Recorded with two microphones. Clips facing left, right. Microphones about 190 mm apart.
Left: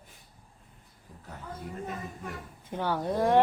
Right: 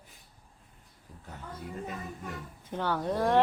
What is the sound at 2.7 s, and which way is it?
Speech, 10° left (ahead or behind).